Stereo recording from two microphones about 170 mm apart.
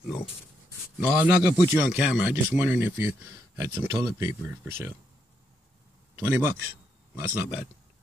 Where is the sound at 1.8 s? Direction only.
5° right (ahead or behind).